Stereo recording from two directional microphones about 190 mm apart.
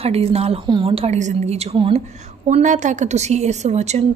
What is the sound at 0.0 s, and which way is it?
A woman's voice, 30° right (ahead or behind).